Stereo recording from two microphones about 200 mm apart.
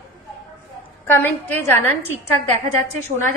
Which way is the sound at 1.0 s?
10° left (ahead or behind).